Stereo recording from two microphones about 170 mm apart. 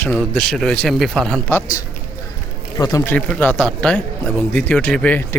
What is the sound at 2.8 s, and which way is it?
Speech, 20° left (ahead or behind).